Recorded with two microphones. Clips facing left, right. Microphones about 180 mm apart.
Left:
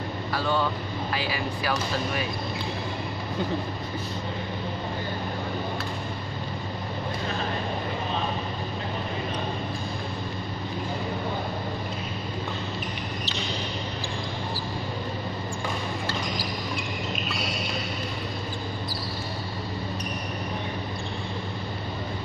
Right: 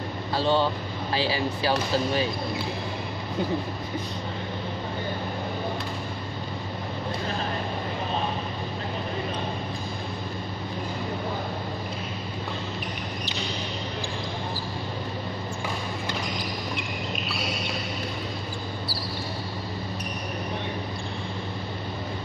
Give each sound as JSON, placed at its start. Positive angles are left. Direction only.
{"t": 0.3, "sound": "speech", "side_deg": -30}